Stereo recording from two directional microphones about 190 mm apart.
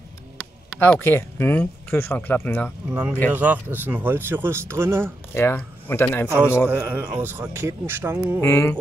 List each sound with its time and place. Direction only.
0.4 s speech: 10° left (ahead or behind)
2.9 s speech: 5° right (ahead or behind)
5.3 s speech: 10° left (ahead or behind)
6.7 s speech: 10° right (ahead or behind)
8.4 s speech: 10° left (ahead or behind)